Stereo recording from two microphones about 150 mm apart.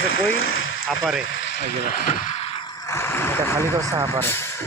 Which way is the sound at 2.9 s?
15° left (ahead or behind).